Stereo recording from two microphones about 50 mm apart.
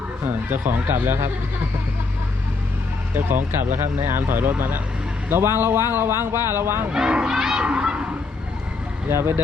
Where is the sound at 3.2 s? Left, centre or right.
Right.